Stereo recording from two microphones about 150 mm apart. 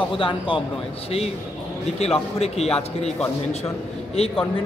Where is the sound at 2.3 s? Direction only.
45° left (ahead or behind).